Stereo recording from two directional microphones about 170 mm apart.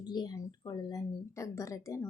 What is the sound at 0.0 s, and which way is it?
Speech, 25° left (ahead or behind).